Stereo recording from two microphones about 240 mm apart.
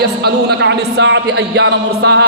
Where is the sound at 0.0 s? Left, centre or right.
Right.